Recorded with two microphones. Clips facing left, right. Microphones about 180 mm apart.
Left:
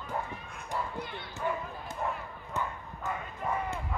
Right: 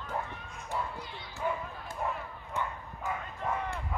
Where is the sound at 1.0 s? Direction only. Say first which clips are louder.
Left 5 dB; 60° left (ahead or behind).